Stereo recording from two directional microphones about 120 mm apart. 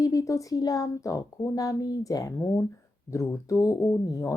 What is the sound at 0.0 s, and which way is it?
Speech, 30° left (ahead or behind).